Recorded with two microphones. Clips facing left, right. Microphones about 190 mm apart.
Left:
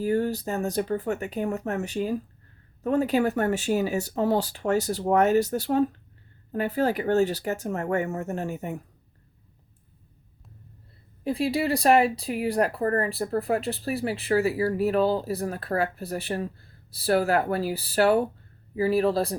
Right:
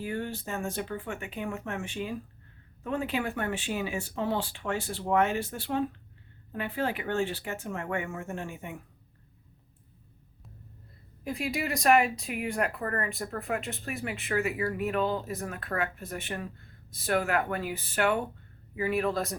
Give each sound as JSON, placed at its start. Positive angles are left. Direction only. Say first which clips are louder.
{"t": 0.0, "sound": "speech", "louder": "left 9 dB", "side_deg": 40}
{"t": 11.2, "sound": "speech", "louder": "left 7 dB", "side_deg": 30}